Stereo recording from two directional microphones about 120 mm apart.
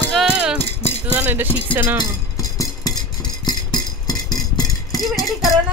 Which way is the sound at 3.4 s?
35° left (ahead or behind).